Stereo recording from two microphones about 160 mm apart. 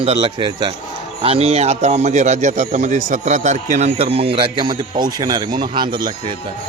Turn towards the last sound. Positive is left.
turn(degrees=-30)  # may be behind; listen again after turning